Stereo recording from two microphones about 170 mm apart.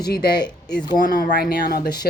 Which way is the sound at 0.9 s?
50° left (ahead or behind).